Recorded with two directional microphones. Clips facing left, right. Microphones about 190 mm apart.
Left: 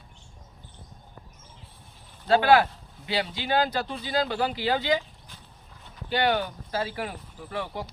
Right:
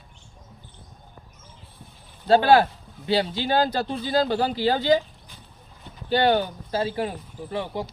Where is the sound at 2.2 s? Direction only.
30° right (ahead or behind).